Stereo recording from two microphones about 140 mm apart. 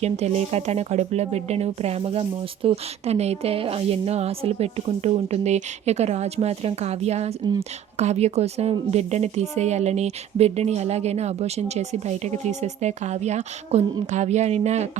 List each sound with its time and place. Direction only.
0.0 s speech: 50° right (ahead or behind)